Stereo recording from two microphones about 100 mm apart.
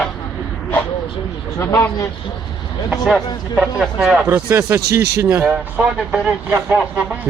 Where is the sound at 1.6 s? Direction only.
30° left (ahead or behind).